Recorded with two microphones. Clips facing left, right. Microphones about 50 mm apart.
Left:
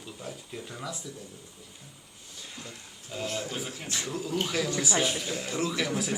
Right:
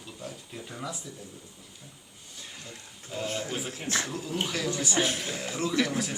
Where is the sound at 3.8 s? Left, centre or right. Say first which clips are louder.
Right 8 dB; right.